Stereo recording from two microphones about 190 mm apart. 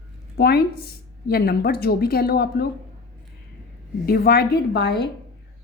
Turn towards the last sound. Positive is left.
turn(degrees=60)  # may be behind; listen again after turning